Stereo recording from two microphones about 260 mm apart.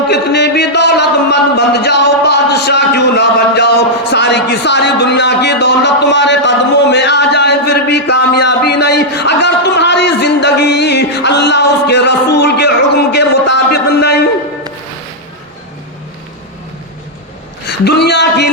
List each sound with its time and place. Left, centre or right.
0.1 s a man's voice: left
17.7 s a man's voice: left